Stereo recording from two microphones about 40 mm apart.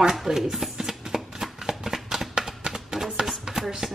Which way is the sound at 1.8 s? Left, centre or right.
Centre.